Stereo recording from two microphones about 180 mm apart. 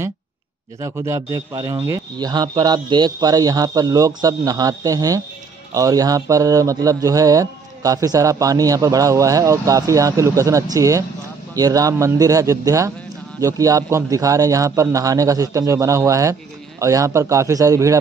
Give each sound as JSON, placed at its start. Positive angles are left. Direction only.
{"t": 0.7, "sound": "a man's voice", "side_deg": -15}